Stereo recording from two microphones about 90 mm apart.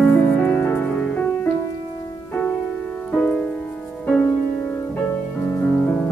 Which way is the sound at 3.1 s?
10° left (ahead or behind).